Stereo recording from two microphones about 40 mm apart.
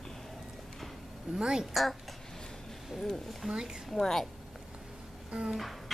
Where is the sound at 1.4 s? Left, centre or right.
Centre.